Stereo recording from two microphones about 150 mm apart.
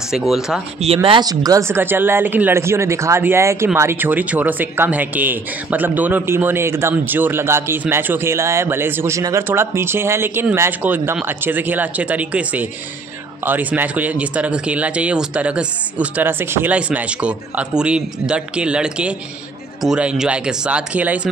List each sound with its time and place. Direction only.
0.1 s speech: centre (ahead or behind)
0.7 s speech: 40° right (ahead or behind); by 21.3 s 10° right (ahead or behind)